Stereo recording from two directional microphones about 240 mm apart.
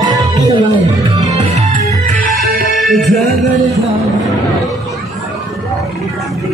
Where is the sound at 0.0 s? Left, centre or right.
Centre.